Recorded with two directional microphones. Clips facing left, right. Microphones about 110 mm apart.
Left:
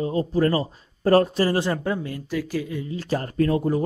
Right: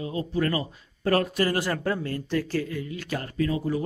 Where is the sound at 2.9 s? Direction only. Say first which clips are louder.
Left 10 dB; 35° left (ahead or behind); by 3.8 s 50° left (ahead or behind).